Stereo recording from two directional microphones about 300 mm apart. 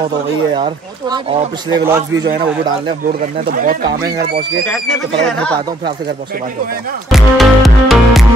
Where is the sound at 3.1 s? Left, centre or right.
Right.